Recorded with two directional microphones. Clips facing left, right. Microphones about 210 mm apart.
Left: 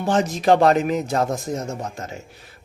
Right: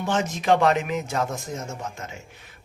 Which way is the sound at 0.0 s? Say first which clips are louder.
Left 5 dB; 35° left (ahead or behind).